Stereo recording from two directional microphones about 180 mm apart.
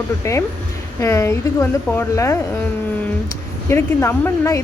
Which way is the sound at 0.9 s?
15° left (ahead or behind).